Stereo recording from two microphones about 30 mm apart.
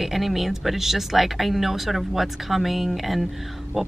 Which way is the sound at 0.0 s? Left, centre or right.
Centre.